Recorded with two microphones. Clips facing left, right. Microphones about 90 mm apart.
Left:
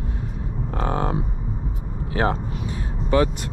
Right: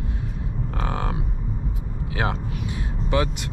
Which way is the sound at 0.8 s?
35° left (ahead or behind).